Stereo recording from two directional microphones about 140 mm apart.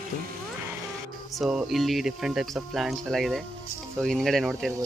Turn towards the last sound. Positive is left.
turn(degrees=0)  # may be behind; listen again after turning